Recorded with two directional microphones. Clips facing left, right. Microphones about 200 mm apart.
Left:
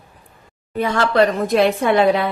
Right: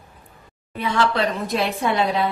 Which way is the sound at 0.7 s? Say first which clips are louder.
Left 5 dB; 45° left (ahead or behind).